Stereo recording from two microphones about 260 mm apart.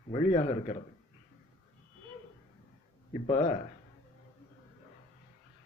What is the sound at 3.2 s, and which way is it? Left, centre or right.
Speech, left.